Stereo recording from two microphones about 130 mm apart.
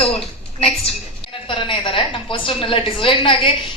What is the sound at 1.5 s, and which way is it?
A woman's voice, 40° left (ahead or behind).